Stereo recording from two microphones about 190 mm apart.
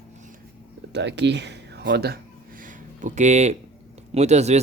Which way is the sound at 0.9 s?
65° right (ahead or behind).